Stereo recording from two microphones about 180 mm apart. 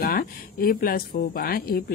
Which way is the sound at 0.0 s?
55° left (ahead or behind).